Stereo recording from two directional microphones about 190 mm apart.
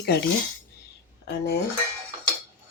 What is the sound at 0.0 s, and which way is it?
Speech, 60° left (ahead or behind).